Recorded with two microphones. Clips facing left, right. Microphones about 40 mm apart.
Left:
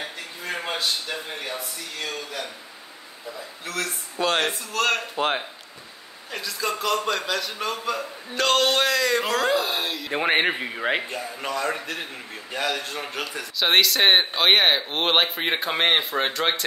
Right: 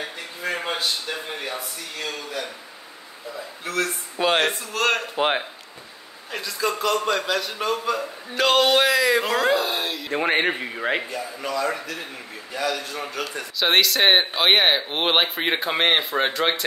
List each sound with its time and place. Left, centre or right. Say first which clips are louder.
0.4 s a sound: right 2 dB; centre
1.4 s speech: right 1 dB; centre
3.6 s a man's voice: right 4 dB; centre
6.3 s speech: right 2 dB; centre
11.1 s a man's voice: right 1 dB; left
13.4 s speech: even; centre